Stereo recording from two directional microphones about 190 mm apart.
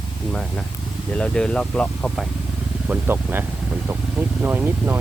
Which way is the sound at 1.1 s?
5° left (ahead or behind).